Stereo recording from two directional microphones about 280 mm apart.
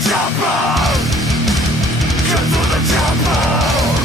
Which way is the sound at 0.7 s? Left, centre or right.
Centre.